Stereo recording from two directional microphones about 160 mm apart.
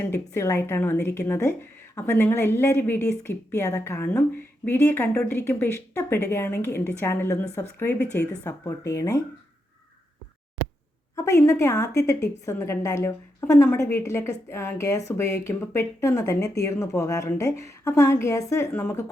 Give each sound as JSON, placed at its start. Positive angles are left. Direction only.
{"t": 0.1, "sound": "a woman's voice", "side_deg": 15}
{"t": 11.1, "sound": "a woman's voice", "side_deg": 20}